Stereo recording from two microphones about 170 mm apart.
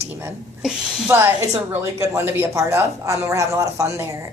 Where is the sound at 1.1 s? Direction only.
15° right (ahead or behind).